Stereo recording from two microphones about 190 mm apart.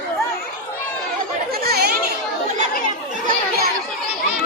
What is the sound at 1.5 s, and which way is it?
Chatter, 55° right (ahead or behind).